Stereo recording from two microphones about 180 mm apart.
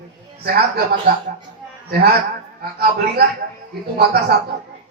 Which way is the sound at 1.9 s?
60° right (ahead or behind).